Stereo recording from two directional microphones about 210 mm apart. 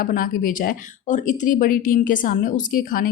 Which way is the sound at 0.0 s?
40° left (ahead or behind).